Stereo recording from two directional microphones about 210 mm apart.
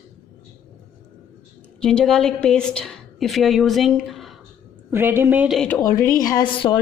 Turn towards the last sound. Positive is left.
turn(degrees=20)  # may be behind; listen again after turning